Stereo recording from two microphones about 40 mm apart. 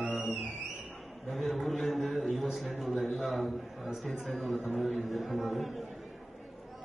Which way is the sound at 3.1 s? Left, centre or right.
Centre.